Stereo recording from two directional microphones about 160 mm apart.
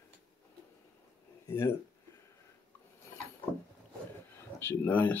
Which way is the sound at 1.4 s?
20° left (ahead or behind).